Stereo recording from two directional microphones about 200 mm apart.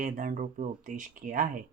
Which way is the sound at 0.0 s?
40° right (ahead or behind).